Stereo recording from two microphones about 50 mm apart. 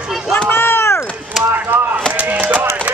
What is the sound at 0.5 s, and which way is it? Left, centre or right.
Run, left.